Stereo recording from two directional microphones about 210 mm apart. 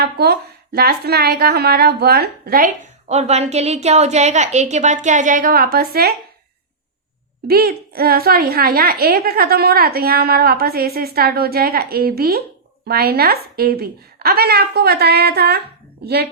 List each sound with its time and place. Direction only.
0.0 s a woman's voice: 50° right (ahead or behind)
7.4 s a woman's voice: 45° right (ahead or behind)